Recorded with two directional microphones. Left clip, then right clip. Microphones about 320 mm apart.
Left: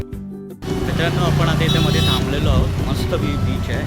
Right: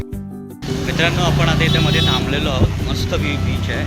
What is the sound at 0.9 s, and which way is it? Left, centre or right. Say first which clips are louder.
Speech: right 4 dB; centre.